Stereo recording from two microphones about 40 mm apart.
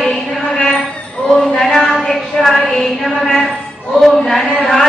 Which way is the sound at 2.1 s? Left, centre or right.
Centre.